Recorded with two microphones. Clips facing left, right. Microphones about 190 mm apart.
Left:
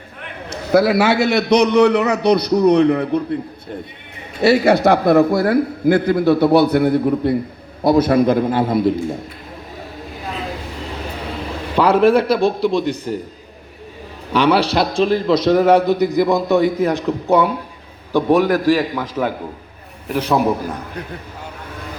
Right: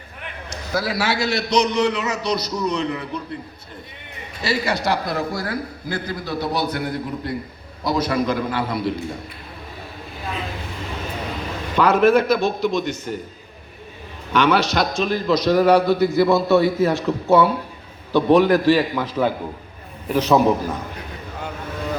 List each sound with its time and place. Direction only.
0.5 s a man's voice: 60° left (ahead or behind)
4.4 s a man's voice: 60° left (ahead or behind)
11.8 s a man's voice: 30° left (ahead or behind)
14.3 s a man's voice: 35° left (ahead or behind); by 20.7 s 10° left (ahead or behind)